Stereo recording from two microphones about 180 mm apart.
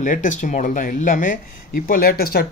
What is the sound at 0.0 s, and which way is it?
Speech, 45° left (ahead or behind).